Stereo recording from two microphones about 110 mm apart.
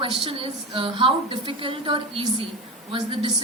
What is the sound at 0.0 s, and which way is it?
A woman's voice, 50° right (ahead or behind).